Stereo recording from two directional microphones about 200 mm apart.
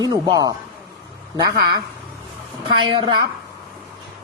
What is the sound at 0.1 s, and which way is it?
Speech, 20° right (ahead or behind).